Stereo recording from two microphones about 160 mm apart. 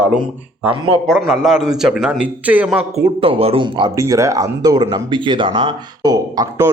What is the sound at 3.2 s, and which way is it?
Speech, 35° right (ahead or behind).